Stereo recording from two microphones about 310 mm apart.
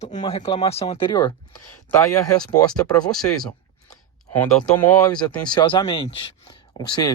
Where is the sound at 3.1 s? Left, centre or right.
Centre.